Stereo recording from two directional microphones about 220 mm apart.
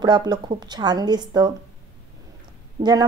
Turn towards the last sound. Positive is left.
turn(degrees=-20)  # may be behind; listen again after turning